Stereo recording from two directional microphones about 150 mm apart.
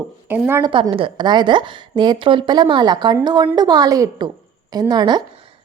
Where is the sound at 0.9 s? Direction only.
35° right (ahead or behind).